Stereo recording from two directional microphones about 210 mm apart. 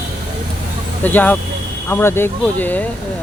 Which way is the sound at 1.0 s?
10° left (ahead or behind).